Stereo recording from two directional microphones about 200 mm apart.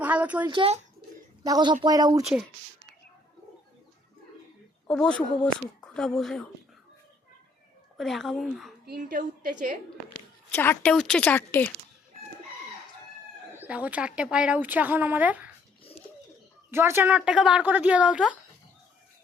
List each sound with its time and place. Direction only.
0.0 s a sound: 5° right (ahead or behind)
0.4 s speech: 25° right (ahead or behind)
1.5 s speech: 20° right (ahead or behind)
4.9 s speech: 5° left (ahead or behind)
7.9 s speech: centre (ahead or behind)
8.9 s a woman's voice: 45° right (ahead or behind)
10.5 s a woman's voice: 10° left (ahead or behind)
13.5 s speech: 10° right (ahead or behind)
16.7 s speech: 10° right (ahead or behind)